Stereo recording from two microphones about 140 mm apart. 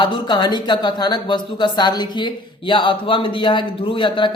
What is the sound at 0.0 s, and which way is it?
Speech, 30° left (ahead or behind).